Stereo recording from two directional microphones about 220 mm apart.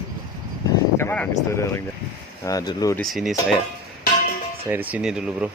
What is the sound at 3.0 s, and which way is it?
Speech, centre (ahead or behind).